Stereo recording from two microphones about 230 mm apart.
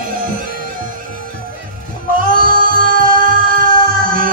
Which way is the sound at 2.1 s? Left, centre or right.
Right.